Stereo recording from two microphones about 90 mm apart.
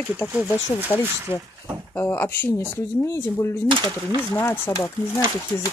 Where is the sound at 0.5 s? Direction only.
25° left (ahead or behind).